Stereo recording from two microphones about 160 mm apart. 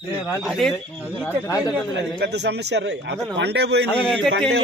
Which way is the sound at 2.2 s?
90° right.